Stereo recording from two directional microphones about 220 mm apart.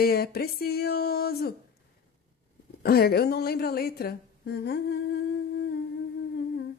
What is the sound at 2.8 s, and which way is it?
A woman's voice, 45° left (ahead or behind).